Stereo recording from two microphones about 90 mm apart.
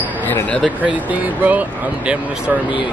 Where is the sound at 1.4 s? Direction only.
15° right (ahead or behind).